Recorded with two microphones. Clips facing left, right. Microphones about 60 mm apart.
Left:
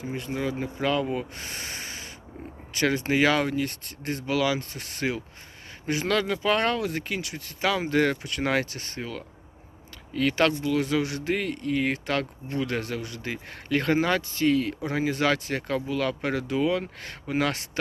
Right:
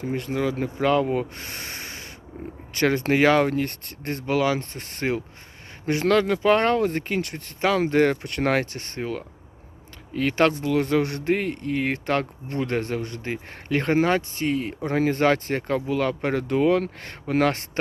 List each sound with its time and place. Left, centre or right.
0.0 s speech: right
0.6 s speech: right
2.3 s speech: right
2.7 s speech: right
14.8 s speech: right